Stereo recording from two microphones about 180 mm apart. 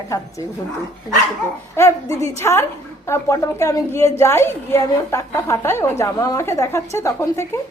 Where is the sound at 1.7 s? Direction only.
15° left (ahead or behind).